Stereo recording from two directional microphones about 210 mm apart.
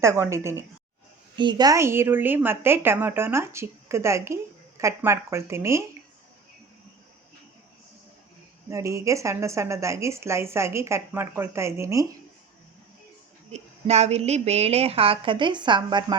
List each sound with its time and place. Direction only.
0.0 s a woman's voice: 15° right (ahead or behind)
8.7 s a woman's voice: 15° right (ahead or behind)
13.5 s a woman's voice: 30° right (ahead or behind)